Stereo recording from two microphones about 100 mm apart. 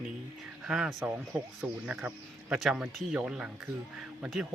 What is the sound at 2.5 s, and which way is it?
Speech, 5° right (ahead or behind).